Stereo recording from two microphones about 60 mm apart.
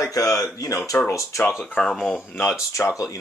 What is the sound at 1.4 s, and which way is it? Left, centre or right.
Speech, left.